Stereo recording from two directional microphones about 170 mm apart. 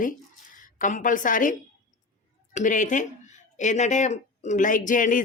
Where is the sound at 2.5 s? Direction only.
50° left (ahead or behind).